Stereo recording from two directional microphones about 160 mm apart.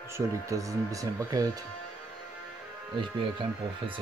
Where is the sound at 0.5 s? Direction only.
20° right (ahead or behind).